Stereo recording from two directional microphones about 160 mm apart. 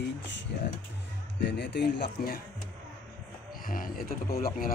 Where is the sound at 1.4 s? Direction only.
90° left.